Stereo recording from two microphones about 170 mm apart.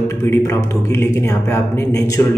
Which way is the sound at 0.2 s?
15° left (ahead or behind).